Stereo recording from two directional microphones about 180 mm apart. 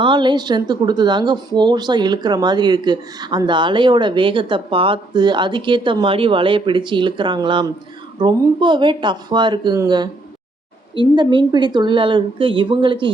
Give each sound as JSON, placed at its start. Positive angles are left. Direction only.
{"t": 0.0, "sound": "a woman's voice", "side_deg": -25}